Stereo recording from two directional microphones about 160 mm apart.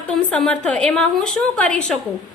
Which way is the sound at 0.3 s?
5° left (ahead or behind).